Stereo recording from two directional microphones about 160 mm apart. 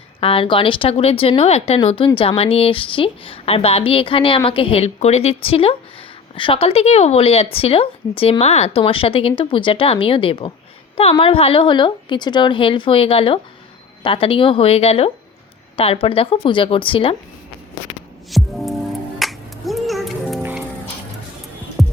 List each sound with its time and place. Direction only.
0.2 s a woman's voice: 35° left (ahead or behind)
18.3 s music: centre (ahead or behind)
20.4 s music: 10° right (ahead or behind)
21.8 s music: centre (ahead or behind)